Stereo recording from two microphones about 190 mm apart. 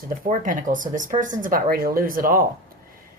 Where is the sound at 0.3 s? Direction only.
45° right (ahead or behind).